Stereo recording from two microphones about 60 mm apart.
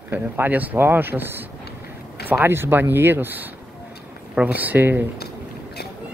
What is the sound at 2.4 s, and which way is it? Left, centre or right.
A man's voice, right.